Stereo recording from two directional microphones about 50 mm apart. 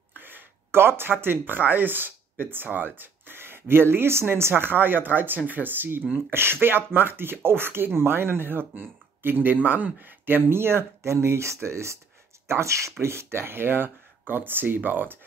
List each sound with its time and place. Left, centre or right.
0.1 s a sound: right
2.5 s speech: right
11.0 s speech: right
13.0 s speech: right